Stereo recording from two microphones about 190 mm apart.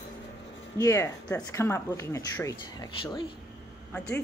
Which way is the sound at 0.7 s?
15° left (ahead or behind).